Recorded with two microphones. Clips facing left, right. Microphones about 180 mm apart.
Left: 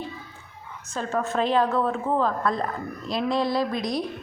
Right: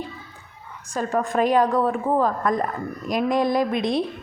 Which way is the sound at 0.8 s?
15° right (ahead or behind).